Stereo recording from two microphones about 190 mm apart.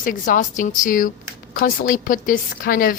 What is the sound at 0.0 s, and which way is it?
Speech, 45° left (ahead or behind).